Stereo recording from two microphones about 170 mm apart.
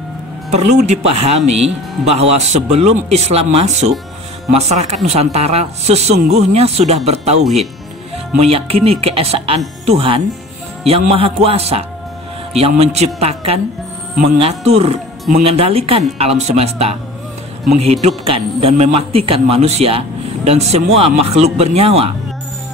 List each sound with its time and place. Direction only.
0.5 s speech: 40° right (ahead or behind)